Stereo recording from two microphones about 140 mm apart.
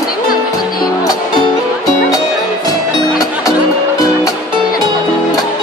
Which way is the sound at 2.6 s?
25° left (ahead or behind).